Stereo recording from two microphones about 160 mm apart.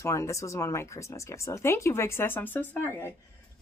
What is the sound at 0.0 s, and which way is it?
A woman's voice, 20° left (ahead or behind).